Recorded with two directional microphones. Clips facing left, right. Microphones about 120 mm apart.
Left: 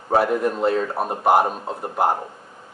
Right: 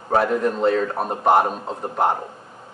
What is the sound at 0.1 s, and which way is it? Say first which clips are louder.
Speech: even; 5° left (ahead or behind).